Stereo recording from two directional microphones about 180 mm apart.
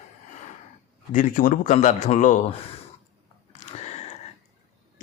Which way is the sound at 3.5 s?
40° left (ahead or behind).